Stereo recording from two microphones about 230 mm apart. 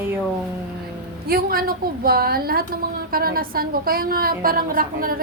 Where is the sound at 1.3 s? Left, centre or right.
Right.